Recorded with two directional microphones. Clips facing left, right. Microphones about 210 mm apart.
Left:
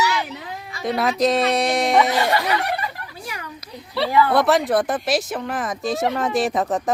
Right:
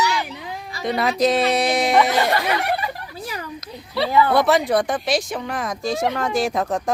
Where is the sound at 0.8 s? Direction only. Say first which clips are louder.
Even; centre (ahead or behind).